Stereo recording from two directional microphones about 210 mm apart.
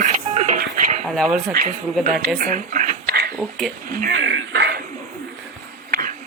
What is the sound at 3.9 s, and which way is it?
Speech, 45° right (ahead or behind).